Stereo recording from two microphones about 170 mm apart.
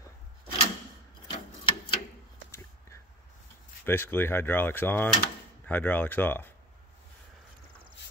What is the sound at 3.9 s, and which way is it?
Speech, 10° left (ahead or behind).